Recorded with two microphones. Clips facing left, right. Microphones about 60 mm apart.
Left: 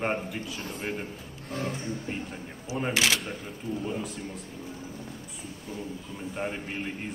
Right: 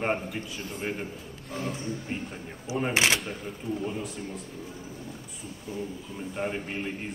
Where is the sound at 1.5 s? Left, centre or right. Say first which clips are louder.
Even; left.